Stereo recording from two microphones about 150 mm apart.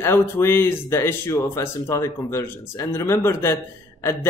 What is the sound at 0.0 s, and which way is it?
Speech, 15° left (ahead or behind).